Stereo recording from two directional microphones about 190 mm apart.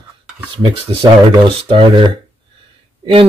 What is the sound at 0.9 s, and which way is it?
Speech, 30° right (ahead or behind).